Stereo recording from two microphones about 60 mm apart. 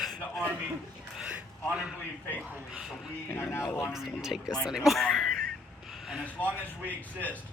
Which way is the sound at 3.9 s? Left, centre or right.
Centre.